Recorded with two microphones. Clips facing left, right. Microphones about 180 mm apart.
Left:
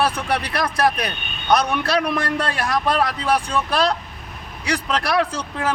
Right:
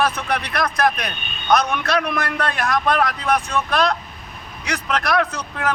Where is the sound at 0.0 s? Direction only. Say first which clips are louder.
Even; 30° left (ahead or behind).